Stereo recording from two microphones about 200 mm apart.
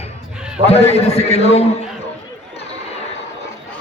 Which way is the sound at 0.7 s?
30° left (ahead or behind).